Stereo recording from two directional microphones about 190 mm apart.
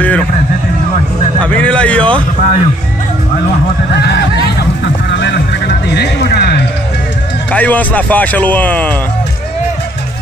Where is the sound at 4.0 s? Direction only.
65° left (ahead or behind).